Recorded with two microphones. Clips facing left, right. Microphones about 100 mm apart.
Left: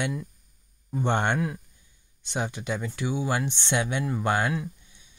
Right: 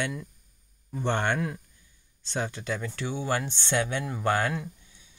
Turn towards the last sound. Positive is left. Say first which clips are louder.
# left 1 dB
turn(degrees=15)  # may be behind; listen again after turning